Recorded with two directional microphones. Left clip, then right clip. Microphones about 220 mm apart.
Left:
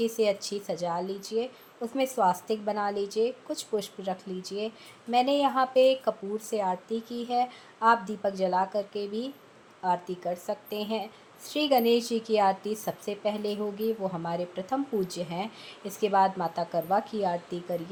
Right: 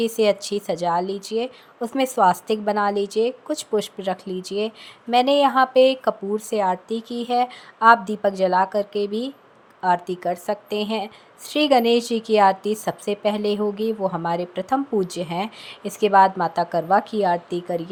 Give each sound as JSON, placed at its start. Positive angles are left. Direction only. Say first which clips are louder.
{"t": 0.0, "sound": "a woman's voice", "louder": "right 7 dB", "side_deg": -35}